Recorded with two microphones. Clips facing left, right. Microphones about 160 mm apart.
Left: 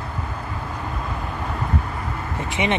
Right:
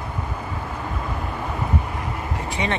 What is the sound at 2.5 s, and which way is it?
Speech, 20° left (ahead or behind).